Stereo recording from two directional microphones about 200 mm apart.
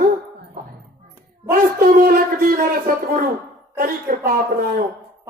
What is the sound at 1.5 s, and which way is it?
Speech, 45° right (ahead or behind).